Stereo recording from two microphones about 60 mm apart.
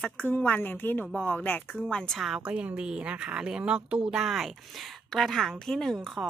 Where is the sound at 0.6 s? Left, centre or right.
Left.